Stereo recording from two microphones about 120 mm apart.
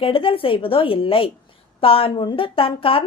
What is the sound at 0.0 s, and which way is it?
A woman's voice, 50° left (ahead or behind).